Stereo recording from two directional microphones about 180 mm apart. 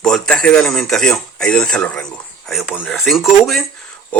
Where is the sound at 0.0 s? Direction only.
Centre (ahead or behind).